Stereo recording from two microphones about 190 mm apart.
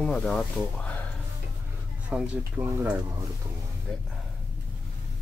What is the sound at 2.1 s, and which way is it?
Speech, 5° right (ahead or behind).